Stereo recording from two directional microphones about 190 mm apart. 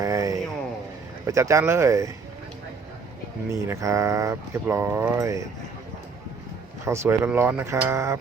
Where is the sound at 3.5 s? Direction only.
15° right (ahead or behind).